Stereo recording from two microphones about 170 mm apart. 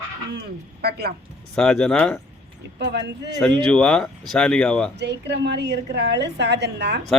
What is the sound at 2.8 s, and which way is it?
Speech, 90° right.